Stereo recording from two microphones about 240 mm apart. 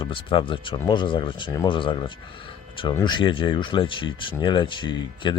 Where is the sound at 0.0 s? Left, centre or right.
Left.